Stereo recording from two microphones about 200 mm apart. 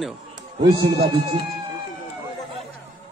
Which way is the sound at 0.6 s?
25° right (ahead or behind).